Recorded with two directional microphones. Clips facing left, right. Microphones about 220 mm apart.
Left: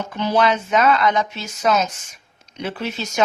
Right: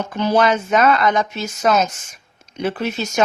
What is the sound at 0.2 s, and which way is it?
Speech, 45° right (ahead or behind).